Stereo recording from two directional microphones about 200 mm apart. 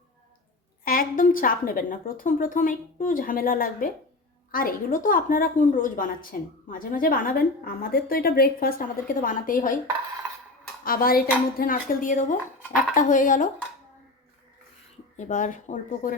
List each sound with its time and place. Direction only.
0.9 s a woman's voice: 45° left (ahead or behind)
10.8 s a woman's voice: 45° left (ahead or behind)
15.1 s speech: 40° left (ahead or behind)